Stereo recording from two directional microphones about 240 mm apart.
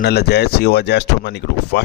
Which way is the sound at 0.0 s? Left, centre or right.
Left.